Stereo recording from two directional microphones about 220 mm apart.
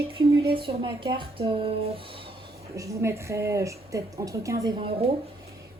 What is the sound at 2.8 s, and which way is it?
A woman's voice, 10° right (ahead or behind).